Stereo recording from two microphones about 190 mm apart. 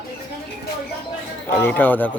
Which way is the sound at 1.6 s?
10° left (ahead or behind).